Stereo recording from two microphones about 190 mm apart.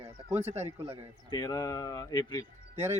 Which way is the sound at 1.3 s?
20° left (ahead or behind).